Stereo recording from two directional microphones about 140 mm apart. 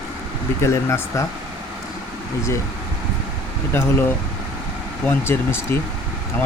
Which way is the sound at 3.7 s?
15° left (ahead or behind).